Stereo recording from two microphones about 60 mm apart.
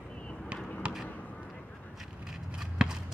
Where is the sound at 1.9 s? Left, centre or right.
Centre.